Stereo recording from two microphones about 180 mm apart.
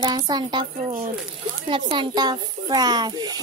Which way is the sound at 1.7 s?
25° right (ahead or behind).